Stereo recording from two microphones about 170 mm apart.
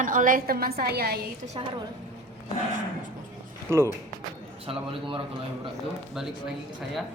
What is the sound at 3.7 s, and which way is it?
Speech, 15° right (ahead or behind).